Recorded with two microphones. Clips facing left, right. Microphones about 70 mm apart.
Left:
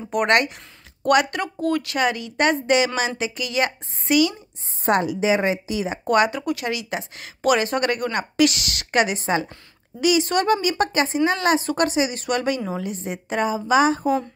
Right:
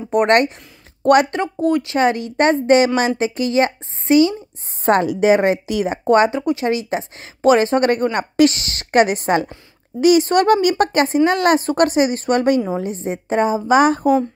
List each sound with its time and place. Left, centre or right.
0.1 s speech: right
1.4 s speech: right
4.8 s a woman's voice: right
5.2 s speech: right
6.0 s speech: right
9.9 s speech: right
13.7 s speech: right